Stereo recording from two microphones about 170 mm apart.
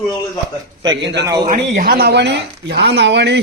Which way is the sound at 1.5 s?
50° right (ahead or behind).